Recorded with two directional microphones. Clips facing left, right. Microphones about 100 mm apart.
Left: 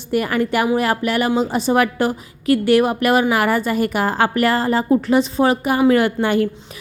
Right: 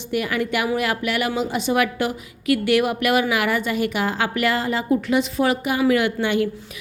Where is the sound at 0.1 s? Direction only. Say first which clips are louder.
Left 4 dB; 40° left (ahead or behind).